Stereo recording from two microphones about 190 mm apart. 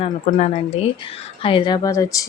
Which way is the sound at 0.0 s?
40° left (ahead or behind).